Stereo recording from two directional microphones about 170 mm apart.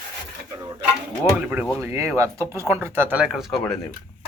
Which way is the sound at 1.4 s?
10° right (ahead or behind).